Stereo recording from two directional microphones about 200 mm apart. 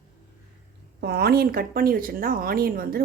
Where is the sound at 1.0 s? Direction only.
50° right (ahead or behind).